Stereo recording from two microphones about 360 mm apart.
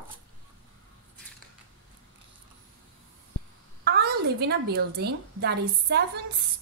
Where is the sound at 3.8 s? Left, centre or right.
Right.